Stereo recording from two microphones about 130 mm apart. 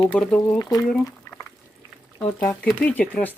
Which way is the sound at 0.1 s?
10° left (ahead or behind).